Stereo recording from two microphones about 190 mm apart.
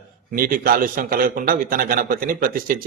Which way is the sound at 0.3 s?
50° right (ahead or behind).